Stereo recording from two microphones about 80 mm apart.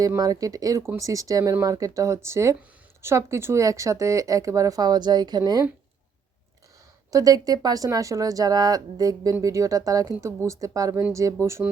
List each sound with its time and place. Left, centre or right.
0.2 s speech: right
4.8 s a woman's voice: right
7.1 s speech: right